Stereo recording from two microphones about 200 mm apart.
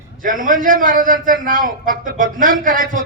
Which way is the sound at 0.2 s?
40° right (ahead or behind).